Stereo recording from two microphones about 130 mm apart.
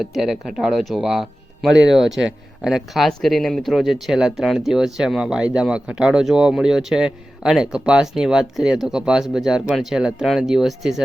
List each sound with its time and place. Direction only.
0.0 s speech: centre (ahead or behind)